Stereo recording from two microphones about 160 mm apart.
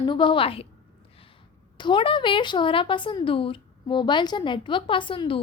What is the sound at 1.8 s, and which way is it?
A woman's voice, 30° left (ahead or behind).